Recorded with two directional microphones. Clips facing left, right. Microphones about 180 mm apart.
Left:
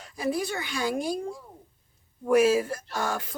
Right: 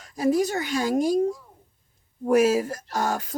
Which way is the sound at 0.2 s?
40° right (ahead or behind).